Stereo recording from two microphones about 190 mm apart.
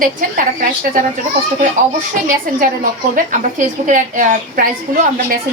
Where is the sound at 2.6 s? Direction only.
45° right (ahead or behind).